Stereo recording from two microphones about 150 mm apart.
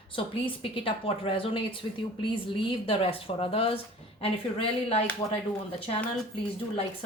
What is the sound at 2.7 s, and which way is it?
Speech, 40° left (ahead or behind).